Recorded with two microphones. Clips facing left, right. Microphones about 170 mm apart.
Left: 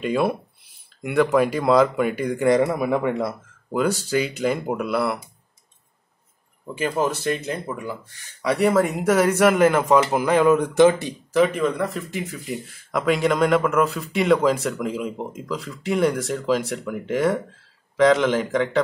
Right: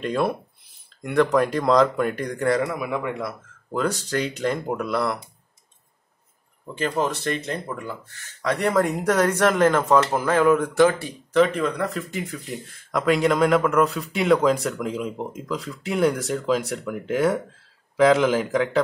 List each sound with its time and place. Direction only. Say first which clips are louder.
0.0 s speech: left 2 dB; 5° left (ahead or behind)
2.7 s speech: left 5 dB; 35° left (ahead or behind)
3.7 s speech: left 3 dB; 10° left (ahead or behind)
6.7 s speech: left 1 dB; 5° left (ahead or behind)
11.3 s speech: even; 5° left (ahead or behind)